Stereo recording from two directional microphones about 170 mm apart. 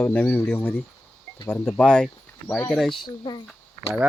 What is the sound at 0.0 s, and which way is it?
Speech, 10° left (ahead or behind).